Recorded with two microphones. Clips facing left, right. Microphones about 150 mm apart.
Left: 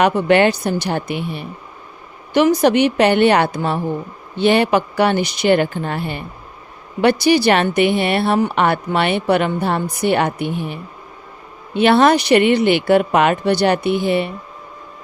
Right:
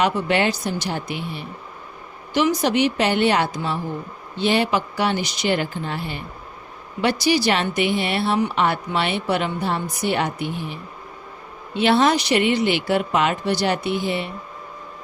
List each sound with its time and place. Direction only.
0.0 s speech: 60° left (ahead or behind)